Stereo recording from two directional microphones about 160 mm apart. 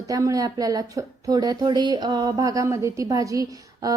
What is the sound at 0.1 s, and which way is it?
Speech, 20° right (ahead or behind).